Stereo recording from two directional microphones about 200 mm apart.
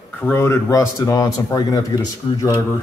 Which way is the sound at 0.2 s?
10° left (ahead or behind).